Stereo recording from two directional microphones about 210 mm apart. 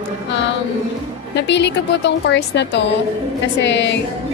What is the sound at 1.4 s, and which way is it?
A woman's voice, 55° left (ahead or behind).